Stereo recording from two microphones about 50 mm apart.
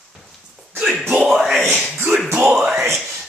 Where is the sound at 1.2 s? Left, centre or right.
Centre.